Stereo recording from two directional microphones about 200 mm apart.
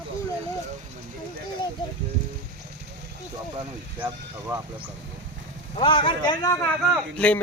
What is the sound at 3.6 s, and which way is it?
Speech, 10° right (ahead or behind).